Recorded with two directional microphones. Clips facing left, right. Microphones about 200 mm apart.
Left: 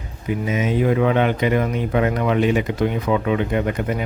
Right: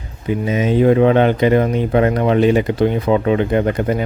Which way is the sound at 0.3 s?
30° right (ahead or behind).